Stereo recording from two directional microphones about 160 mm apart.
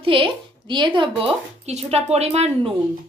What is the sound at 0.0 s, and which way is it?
A woman's voice, 35° right (ahead or behind).